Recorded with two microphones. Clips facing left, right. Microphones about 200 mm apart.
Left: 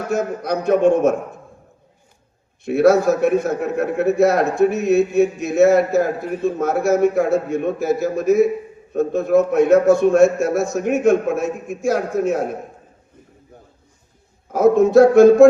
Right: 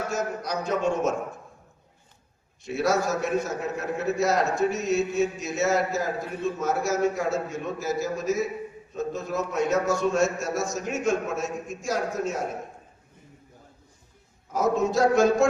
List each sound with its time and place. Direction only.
0.1 s a man's voice: 55° left (ahead or behind)
2.6 s a man's voice: 55° left (ahead or behind)
14.5 s a man's voice: 60° left (ahead or behind)